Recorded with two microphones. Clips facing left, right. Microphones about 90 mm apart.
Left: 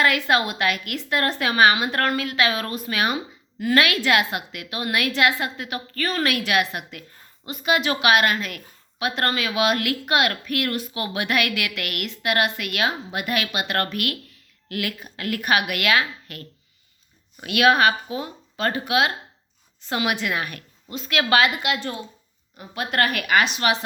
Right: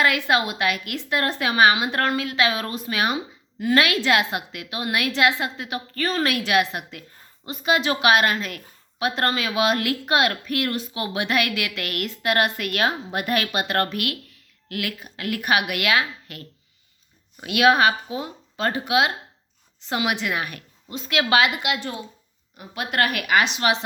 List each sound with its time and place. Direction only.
0.0 s a woman's voice: 15° right (ahead or behind)
14.7 s a woman's voice: centre (ahead or behind); by 23.8 s 25° right (ahead or behind)